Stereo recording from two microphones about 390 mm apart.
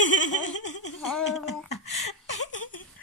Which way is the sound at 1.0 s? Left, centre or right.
Centre.